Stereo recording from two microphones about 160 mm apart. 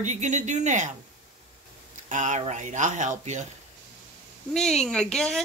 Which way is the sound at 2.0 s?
50° right (ahead or behind).